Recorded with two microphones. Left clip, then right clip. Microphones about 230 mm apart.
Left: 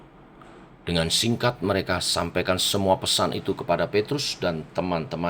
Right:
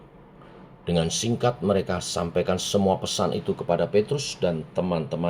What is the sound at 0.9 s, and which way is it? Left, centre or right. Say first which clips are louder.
Speech: left 2 dB; left.